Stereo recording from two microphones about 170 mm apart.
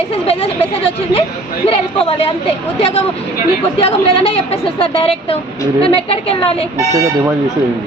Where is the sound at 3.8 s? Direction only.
35° left (ahead or behind).